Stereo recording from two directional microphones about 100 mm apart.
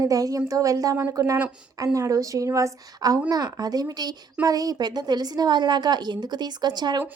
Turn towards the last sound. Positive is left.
turn(degrees=-45)  # may be behind; listen again after turning